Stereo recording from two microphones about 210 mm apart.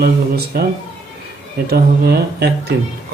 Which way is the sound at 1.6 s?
50° right (ahead or behind).